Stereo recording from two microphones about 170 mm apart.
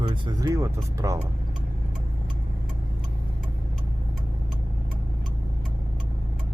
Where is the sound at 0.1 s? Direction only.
25° right (ahead or behind).